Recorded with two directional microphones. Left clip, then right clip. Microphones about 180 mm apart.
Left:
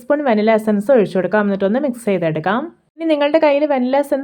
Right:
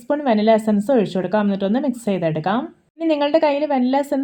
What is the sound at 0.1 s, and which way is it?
Speech, 20° left (ahead or behind).